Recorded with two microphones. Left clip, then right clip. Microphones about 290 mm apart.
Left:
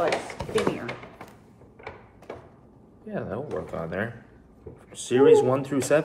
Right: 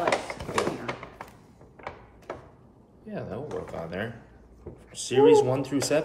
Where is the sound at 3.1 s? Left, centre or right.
Centre.